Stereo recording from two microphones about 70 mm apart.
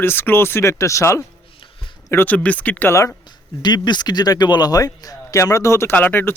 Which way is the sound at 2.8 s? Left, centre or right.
Left.